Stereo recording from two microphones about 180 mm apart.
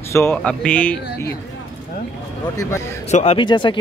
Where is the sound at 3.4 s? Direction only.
25° left (ahead or behind).